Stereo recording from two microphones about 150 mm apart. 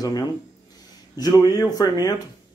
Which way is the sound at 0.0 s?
25° left (ahead or behind).